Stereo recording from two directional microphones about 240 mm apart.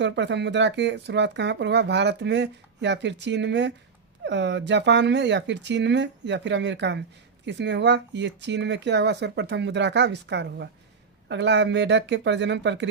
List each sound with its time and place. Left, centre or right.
0.0 s speech: right